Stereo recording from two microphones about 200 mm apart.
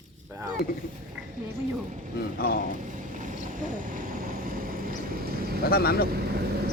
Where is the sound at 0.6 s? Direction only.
50° left (ahead or behind).